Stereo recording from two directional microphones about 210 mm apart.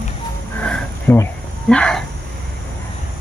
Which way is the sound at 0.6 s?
5° left (ahead or behind).